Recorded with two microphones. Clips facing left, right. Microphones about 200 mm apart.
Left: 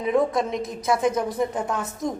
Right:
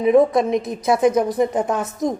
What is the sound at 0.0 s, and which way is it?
A woman's voice, 20° right (ahead or behind).